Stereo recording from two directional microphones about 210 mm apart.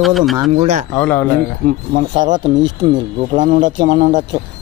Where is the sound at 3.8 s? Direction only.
20° right (ahead or behind).